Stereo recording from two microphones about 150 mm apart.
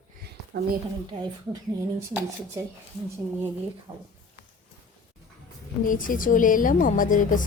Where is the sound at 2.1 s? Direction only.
15° right (ahead or behind).